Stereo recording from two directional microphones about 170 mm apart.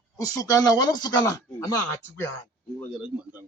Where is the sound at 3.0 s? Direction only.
10° right (ahead or behind).